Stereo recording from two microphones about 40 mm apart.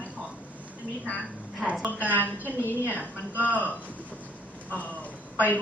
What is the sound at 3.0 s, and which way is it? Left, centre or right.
Speech, right.